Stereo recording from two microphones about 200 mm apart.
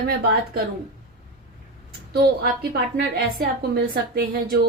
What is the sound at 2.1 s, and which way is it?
A woman's voice, 55° right (ahead or behind).